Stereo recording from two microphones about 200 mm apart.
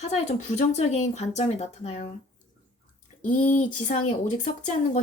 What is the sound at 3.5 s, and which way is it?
Speech, 40° left (ahead or behind).